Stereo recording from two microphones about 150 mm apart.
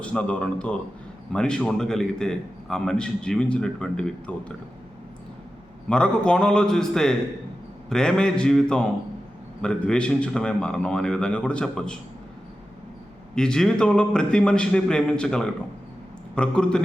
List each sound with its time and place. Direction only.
0.0 s a man's voice: 10° left (ahead or behind)
5.9 s a man's voice: 5° left (ahead or behind)
13.3 s a man's voice: 5° left (ahead or behind)